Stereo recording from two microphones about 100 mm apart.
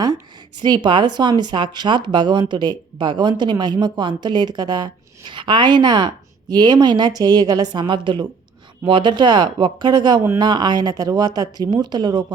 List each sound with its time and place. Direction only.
0.6 s speech: 50° right (ahead or behind)